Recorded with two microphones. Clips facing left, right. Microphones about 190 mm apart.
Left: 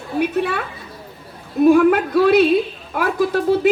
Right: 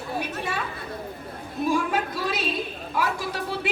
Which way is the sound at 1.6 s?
60° left (ahead or behind).